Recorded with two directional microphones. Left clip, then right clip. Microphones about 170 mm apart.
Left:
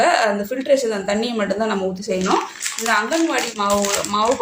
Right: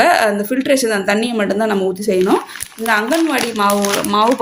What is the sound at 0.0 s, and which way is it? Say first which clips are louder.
Speech: right 4 dB; 40° right (ahead or behind).